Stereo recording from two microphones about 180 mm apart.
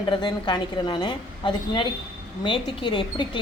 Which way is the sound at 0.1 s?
25° left (ahead or behind).